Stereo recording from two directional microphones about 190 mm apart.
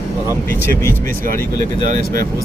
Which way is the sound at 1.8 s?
50° right (ahead or behind).